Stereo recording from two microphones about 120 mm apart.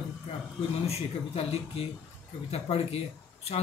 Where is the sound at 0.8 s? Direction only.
55° left (ahead or behind).